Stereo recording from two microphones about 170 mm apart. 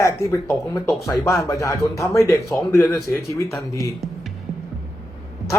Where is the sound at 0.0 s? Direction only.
15° left (ahead or behind).